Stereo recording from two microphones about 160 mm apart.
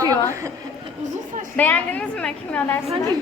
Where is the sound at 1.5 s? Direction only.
10° left (ahead or behind).